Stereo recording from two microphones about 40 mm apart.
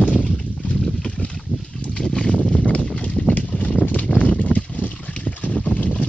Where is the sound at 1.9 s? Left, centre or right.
Left.